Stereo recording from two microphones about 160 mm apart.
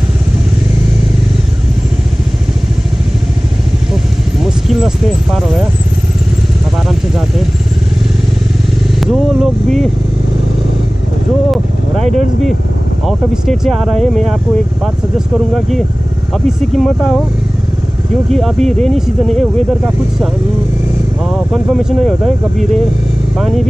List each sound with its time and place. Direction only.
4.4 s a sound: centre (ahead or behind)
6.9 s vehicle: centre (ahead or behind)
9.0 s vehicle: centre (ahead or behind)
12.0 s speech: 45° right (ahead or behind)
13.0 s speech: centre (ahead or behind)
18.3 s speech: centre (ahead or behind)
21.5 s speech: centre (ahead or behind)